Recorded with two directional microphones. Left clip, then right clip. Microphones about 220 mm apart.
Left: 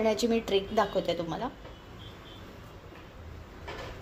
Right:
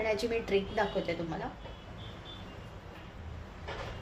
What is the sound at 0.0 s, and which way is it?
A woman's voice, 30° left (ahead or behind).